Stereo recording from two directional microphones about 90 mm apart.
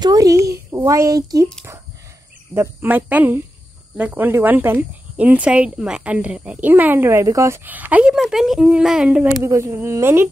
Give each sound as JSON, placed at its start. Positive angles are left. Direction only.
{"t": 0.0, "sound": "speech", "side_deg": -40}
{"t": 2.5, "sound": "speech", "side_deg": -25}
{"t": 8.1, "sound": "speech", "side_deg": -5}
{"t": 9.4, "sound": "speech", "side_deg": -35}